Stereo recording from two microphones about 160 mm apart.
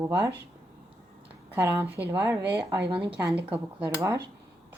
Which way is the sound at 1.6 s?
15° right (ahead or behind).